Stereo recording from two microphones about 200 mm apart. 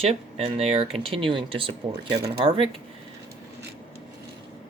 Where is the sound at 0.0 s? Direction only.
30° right (ahead or behind).